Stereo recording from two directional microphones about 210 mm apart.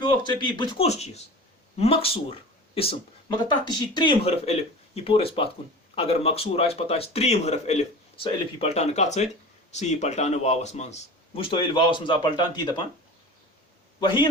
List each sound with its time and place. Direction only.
0.0 s speech: 20° left (ahead or behind)
14.0 s speech: 25° left (ahead or behind)